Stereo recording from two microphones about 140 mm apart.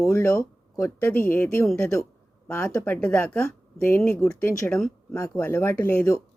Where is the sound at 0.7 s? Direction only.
20° left (ahead or behind).